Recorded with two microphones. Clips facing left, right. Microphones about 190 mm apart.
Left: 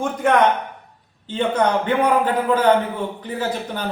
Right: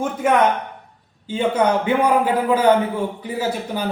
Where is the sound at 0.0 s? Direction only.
10° right (ahead or behind).